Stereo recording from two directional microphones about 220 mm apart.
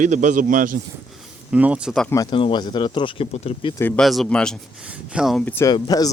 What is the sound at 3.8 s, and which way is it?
Speech, 5° left (ahead or behind).